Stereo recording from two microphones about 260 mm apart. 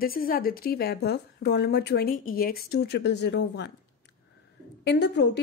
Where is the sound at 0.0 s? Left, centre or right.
Left.